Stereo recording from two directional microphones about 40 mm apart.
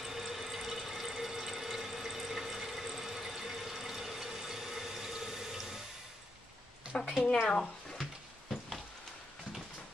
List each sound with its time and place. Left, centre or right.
0.0 s water: centre
7.4 s speech: centre
8.0 s a sound: centre